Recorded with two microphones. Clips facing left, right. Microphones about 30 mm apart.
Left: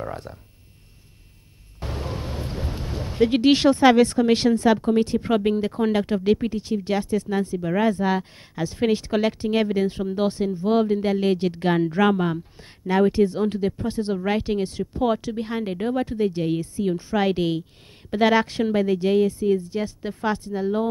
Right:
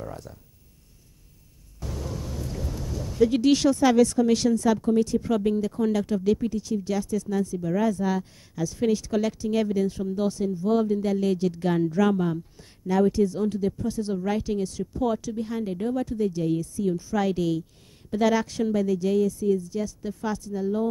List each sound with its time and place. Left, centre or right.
0.0 s speech: left
1.8 s speech: left